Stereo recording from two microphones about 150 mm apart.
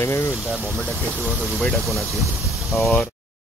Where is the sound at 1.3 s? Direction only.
Centre (ahead or behind).